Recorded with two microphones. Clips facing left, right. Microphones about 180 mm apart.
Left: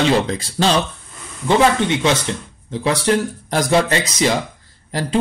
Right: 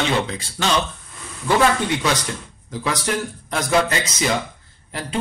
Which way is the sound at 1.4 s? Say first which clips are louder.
Left 3 dB; 25° left (ahead or behind).